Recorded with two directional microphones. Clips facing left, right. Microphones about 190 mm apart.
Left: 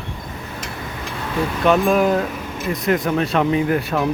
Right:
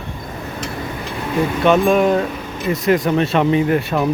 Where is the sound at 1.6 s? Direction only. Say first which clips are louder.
Right 2 dB; centre (ahead or behind).